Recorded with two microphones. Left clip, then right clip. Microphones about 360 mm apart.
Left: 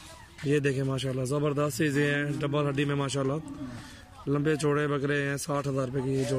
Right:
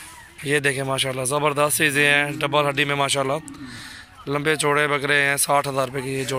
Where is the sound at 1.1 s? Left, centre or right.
Right.